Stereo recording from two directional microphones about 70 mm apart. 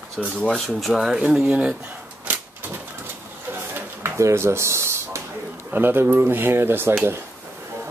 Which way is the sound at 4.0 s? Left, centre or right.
Right.